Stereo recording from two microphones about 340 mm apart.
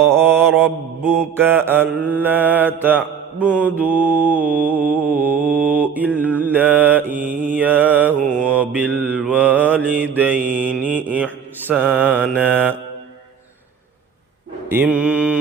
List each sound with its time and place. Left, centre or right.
0.0 s mantra: centre
3.3 s mantra: centre
7.3 s mantra: right
7.5 s mantra: centre
14.7 s mantra: centre